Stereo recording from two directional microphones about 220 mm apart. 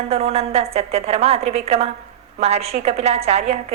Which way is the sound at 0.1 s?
30° right (ahead or behind).